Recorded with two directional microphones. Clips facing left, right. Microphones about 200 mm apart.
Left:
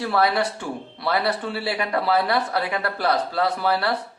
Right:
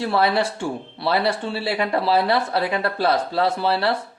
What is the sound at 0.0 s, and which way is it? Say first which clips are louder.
Speech: right 1 dB; 25° right (ahead or behind).